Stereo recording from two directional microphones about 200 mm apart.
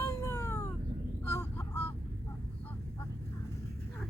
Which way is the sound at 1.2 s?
15° left (ahead or behind).